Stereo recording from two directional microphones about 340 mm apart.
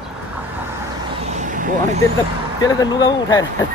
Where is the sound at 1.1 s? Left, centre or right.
Centre.